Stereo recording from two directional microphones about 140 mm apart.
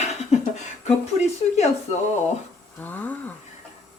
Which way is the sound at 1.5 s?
55° left (ahead or behind).